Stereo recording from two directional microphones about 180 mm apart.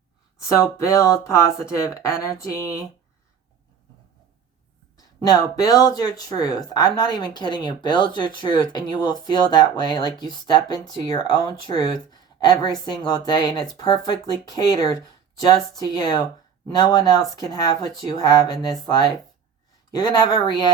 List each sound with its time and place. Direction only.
0.3 s speech: 15° left (ahead or behind)
4.9 s speech: 20° left (ahead or behind)